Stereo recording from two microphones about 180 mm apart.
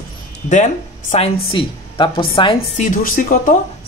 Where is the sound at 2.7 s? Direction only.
45° left (ahead or behind).